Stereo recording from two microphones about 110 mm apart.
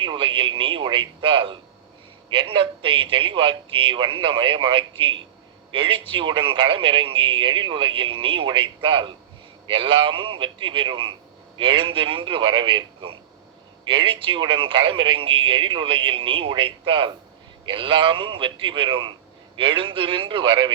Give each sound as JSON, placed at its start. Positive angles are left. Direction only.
{"t": 0.0, "sound": "a man's voice", "side_deg": -50}